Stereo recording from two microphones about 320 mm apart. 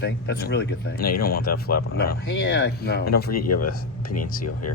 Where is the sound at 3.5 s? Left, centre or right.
Left.